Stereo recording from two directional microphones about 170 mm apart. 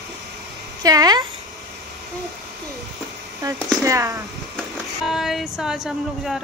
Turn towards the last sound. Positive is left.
turn(degrees=0)  # may be behind; listen again after turning